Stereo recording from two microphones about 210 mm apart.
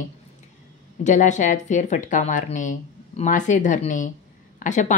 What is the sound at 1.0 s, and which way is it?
Speech, 35° left (ahead or behind).